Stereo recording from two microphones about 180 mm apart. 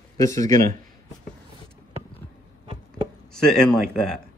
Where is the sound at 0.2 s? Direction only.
20° left (ahead or behind).